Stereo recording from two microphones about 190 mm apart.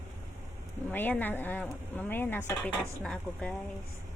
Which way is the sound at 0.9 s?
10° left (ahead or behind).